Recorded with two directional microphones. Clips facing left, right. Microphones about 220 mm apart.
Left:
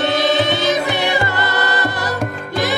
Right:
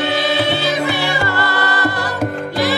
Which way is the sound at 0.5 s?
20° left (ahead or behind).